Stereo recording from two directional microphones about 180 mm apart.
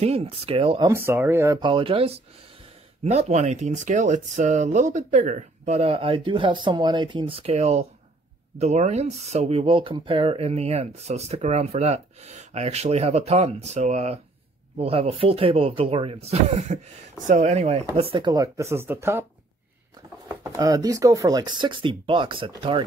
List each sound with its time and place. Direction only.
0.0 s speech: 35° right (ahead or behind)
0.8 s speech: 15° right (ahead or behind)
1.6 s speech: 25° right (ahead or behind)
20.5 s speech: 20° right (ahead or behind)